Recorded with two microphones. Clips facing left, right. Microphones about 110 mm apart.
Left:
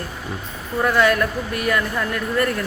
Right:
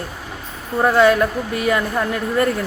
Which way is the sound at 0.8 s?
25° right (ahead or behind).